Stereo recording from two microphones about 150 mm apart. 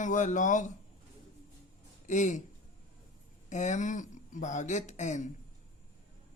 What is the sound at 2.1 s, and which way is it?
Speech, 55° left (ahead or behind).